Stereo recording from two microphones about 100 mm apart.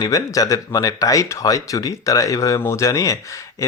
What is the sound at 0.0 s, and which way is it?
Speech, 35° left (ahead or behind).